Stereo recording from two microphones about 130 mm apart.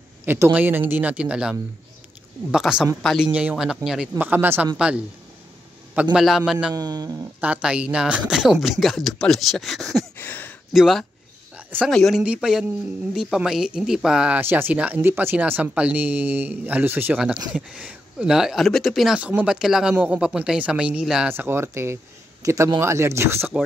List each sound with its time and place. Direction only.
0.2 s speech: 15° right (ahead or behind); by 3.3 s centre (ahead or behind)
3.3 s speech: 10° right (ahead or behind)
4.2 s speech: 15° right (ahead or behind)
6.1 s speech: centre (ahead or behind)
6.7 s speech: 30° right (ahead or behind)
7.3 s speech: 10° right (ahead or behind)
10.1 s a sound: 15° left (ahead or behind)
10.7 s speech: centre (ahead or behind)
11.5 s a sound: 10° right (ahead or behind)
11.9 s speech: centre (ahead or behind)
21.3 s a man's voice: 15° right (ahead or behind)